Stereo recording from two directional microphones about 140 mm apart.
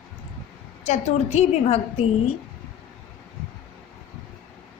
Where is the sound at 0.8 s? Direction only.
55° left (ahead or behind).